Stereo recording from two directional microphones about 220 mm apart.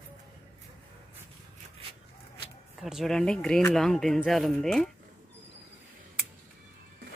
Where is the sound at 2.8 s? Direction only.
Centre (ahead or behind).